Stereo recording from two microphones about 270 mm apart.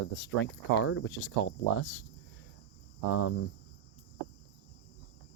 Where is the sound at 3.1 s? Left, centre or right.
Left.